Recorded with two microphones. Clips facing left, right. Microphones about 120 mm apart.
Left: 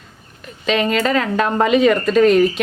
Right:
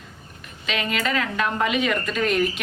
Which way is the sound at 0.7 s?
35° left (ahead or behind).